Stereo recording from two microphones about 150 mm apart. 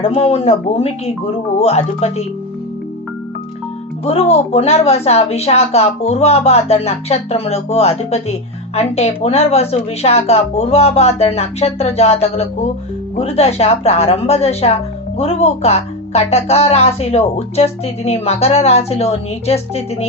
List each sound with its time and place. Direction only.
0.0 s a woman's voice: 45° left (ahead or behind)
4.0 s a woman's voice: 45° left (ahead or behind)